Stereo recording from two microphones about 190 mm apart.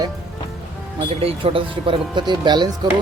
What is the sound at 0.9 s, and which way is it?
Speech, 30° right (ahead or behind).